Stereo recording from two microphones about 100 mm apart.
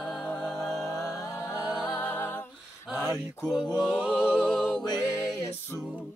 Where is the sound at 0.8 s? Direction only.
30° left (ahead or behind).